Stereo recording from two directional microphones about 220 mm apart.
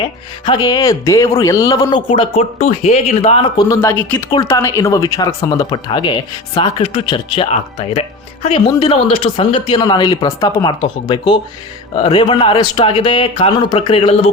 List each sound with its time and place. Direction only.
0.0 s speech: 20° left (ahead or behind)
3.6 s speech: 15° left (ahead or behind)